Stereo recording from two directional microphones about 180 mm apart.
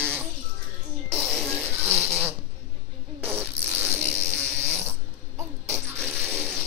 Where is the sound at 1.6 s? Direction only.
35° right (ahead or behind).